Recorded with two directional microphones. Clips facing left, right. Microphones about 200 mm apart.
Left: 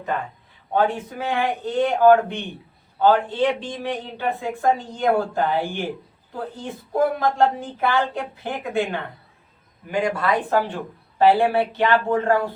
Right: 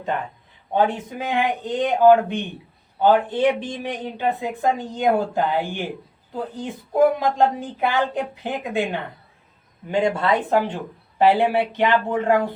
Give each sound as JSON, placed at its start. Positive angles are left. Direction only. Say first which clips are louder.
{"t": 0.7, "sound": "a man's voice", "louder": "even", "side_deg": -20}